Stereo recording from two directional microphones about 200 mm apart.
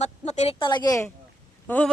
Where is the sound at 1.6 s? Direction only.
5° left (ahead or behind).